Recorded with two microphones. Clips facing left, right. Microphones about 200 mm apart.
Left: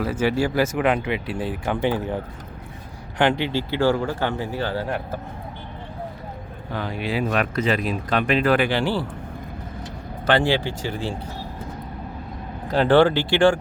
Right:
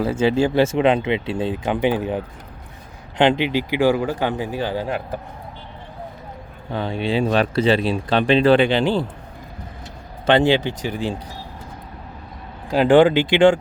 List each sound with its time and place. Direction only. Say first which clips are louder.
0.0 s speech: right 4 dB; 25° right (ahead or behind)
6.7 s speech: right 4 dB; 25° right (ahead or behind)
10.2 s speech: right 4 dB; 20° right (ahead or behind)
12.6 s speech: right 3 dB; 15° right (ahead or behind)